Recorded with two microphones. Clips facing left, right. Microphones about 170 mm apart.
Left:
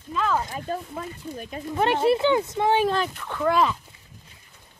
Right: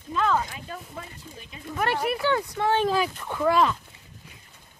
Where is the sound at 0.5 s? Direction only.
40° left (ahead or behind).